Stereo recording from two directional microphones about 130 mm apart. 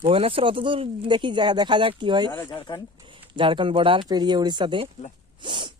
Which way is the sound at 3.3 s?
40° right (ahead or behind).